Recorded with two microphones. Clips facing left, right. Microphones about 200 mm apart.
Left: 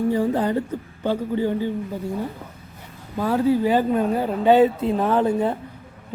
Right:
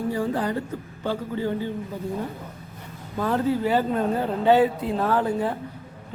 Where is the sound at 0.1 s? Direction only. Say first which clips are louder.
Left 4 dB; 20° left (ahead or behind).